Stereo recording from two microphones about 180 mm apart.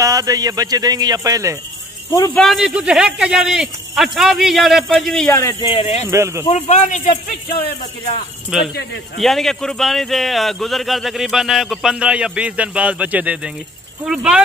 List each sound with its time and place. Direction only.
0.0 s speech: 20° right (ahead or behind)
2.0 s speech: 15° left (ahead or behind)
2.4 s a man's voice: centre (ahead or behind); by 5.7 s 15° left (ahead or behind)
5.7 s a man's voice: 35° left (ahead or behind)
6.0 s speech: 15° right (ahead or behind)
6.5 s a man's voice: 40° left (ahead or behind)
8.5 s a man's voice: 5° right (ahead or behind)